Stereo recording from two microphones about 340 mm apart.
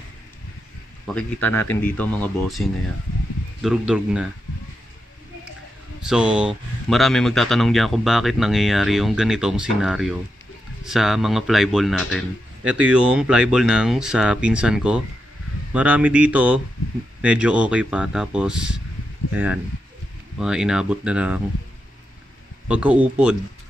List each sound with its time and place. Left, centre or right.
1.0 s speech: centre
3.6 s speech: centre
6.0 s speech: centre
22.7 s speech: centre